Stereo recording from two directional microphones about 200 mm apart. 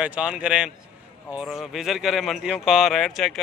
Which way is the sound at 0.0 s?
5° right (ahead or behind).